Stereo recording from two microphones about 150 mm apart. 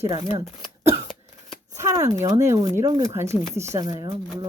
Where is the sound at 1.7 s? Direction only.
20° right (ahead or behind).